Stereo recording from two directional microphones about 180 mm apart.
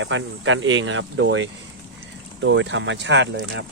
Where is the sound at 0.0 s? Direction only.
90° right.